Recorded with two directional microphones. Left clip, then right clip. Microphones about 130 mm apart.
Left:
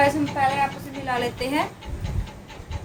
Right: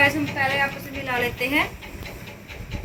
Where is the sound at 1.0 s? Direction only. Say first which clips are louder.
Right 1 dB; 20° left (ahead or behind).